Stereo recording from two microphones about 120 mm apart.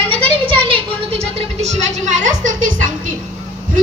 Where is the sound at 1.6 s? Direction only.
90° right.